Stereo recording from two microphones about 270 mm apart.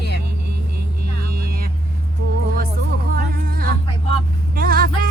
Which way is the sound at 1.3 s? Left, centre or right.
Right.